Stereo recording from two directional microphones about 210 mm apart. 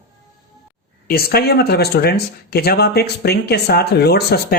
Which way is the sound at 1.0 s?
45° left (ahead or behind).